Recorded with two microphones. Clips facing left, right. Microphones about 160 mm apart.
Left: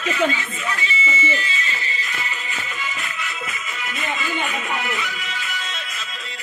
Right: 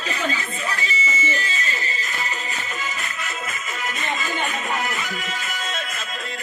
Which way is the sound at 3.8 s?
40° right (ahead or behind).